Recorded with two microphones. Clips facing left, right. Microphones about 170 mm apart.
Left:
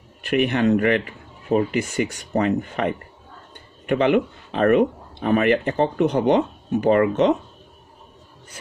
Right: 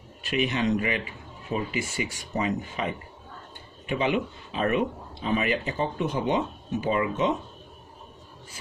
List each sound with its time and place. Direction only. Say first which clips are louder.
0.2 s speech: left 7 dB; 60° left (ahead or behind)